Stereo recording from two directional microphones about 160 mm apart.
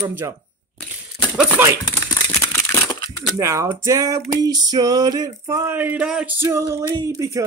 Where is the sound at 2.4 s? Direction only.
15° left (ahead or behind).